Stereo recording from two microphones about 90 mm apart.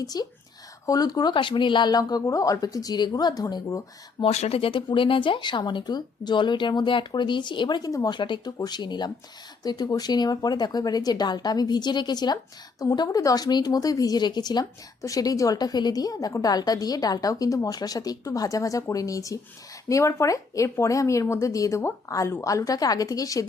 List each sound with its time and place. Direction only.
0.0 s speech: 45° left (ahead or behind)
1.3 s speech: 65° left (ahead or behind); by 3.8 s 40° left (ahead or behind)
4.2 s speech: 90° left
4.9 s speech: 70° left (ahead or behind)
8.5 s speech: 50° left (ahead or behind)